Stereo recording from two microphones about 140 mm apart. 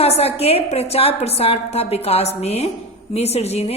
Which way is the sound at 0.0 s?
45° left (ahead or behind).